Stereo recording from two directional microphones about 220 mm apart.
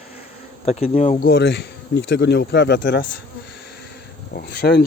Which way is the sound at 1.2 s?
50° left (ahead or behind).